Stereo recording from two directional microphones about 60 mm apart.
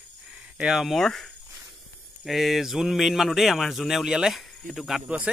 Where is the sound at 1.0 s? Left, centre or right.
Centre.